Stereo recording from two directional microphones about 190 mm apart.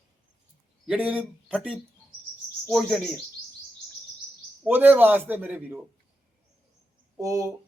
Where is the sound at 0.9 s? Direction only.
5° right (ahead or behind).